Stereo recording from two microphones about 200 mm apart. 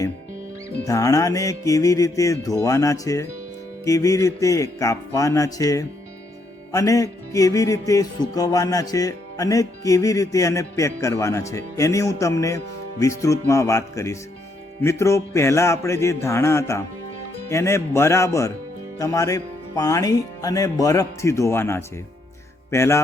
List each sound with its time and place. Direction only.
0.9 s music: 15° left (ahead or behind)